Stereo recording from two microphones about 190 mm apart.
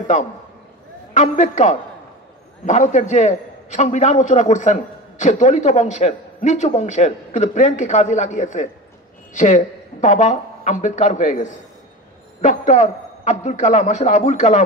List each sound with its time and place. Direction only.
1.1 s a man's voice: 35° left (ahead or behind)